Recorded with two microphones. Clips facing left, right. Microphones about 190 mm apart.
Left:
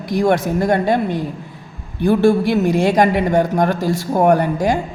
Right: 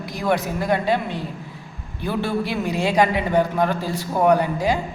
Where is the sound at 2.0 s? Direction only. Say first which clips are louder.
Left 10 dB; 45° left (ahead or behind).